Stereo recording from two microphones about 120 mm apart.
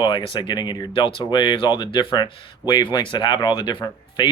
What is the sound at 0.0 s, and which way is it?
Speech, 45° left (ahead or behind).